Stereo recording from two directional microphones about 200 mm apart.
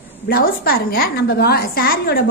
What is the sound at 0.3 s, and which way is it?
A woman's voice, 45° left (ahead or behind).